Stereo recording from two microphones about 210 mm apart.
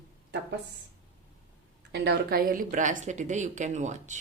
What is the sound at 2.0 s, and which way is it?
A woman's voice, 45° right (ahead or behind).